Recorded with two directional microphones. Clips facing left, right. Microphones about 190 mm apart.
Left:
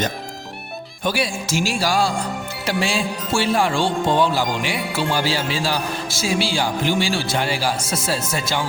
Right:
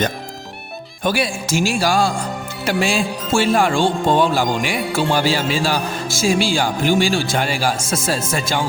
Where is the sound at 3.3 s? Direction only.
55° right (ahead or behind).